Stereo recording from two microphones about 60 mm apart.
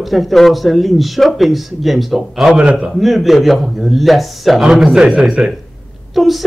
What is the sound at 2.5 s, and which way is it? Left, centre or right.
Speech, right.